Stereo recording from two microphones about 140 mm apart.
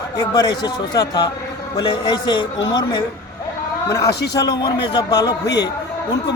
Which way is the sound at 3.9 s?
25° left (ahead or behind).